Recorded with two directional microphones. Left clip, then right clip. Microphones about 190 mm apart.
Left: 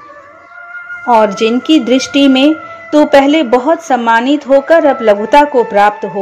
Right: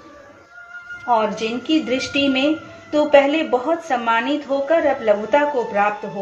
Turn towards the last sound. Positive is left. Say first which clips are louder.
# left 10 dB
turn(degrees=40)  # may be behind; listen again after turning